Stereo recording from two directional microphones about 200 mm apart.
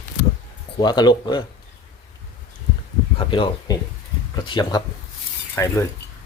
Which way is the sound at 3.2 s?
25° left (ahead or behind).